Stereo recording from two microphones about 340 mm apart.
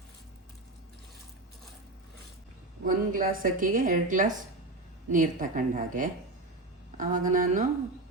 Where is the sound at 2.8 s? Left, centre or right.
Right.